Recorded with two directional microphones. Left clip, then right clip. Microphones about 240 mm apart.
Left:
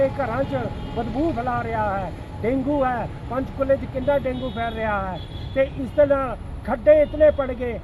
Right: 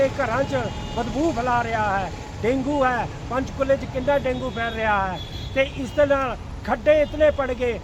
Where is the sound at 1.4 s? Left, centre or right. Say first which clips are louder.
Right 2 dB; centre.